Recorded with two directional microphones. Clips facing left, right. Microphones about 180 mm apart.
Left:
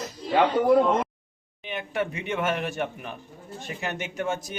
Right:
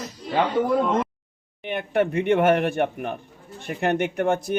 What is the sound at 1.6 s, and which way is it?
A man's voice, 55° right (ahead or behind).